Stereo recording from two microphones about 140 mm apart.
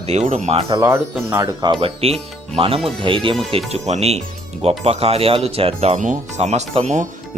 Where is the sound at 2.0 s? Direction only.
45° right (ahead or behind).